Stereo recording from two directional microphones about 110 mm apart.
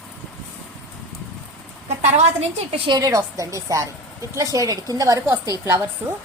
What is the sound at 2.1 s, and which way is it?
Speech, 90° right.